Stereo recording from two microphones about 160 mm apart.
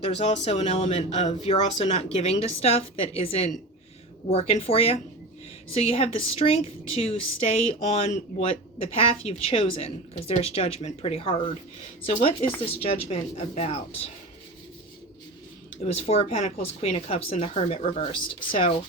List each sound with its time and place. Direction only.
0.0 s a woman's voice: 40° left (ahead or behind)
15.8 s a woman's voice: 40° left (ahead or behind)